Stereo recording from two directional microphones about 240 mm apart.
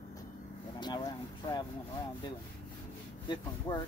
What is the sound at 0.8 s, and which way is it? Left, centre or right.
Speech, centre.